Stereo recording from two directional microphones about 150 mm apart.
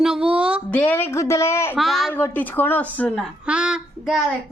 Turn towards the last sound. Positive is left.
turn(degrees=-5)  # may be behind; listen again after turning